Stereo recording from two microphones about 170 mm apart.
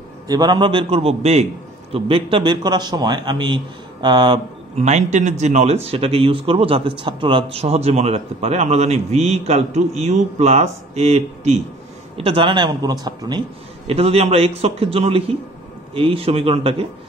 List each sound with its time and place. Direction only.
0.3 s a man's voice: 25° right (ahead or behind)
4.8 s a man's voice: 45° right (ahead or behind); by 13.4 s 25° right (ahead or behind)
13.8 s speech: 35° right (ahead or behind)